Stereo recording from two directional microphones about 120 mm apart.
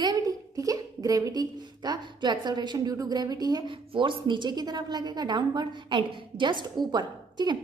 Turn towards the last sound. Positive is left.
turn(degrees=-35)  # may be behind; listen again after turning